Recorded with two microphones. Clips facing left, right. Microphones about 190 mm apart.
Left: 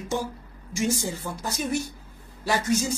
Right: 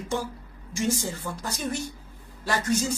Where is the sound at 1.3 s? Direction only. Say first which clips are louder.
Left 3 dB; 10° left (ahead or behind).